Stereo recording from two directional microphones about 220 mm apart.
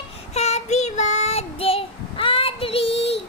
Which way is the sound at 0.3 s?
30° left (ahead or behind).